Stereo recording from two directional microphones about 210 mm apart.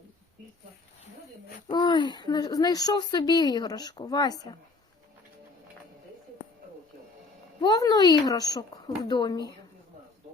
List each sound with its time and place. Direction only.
1.7 s speech: 20° left (ahead or behind)
7.6 s speech: 20° left (ahead or behind)